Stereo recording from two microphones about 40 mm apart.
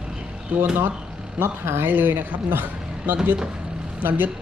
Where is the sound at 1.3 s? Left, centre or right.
Right.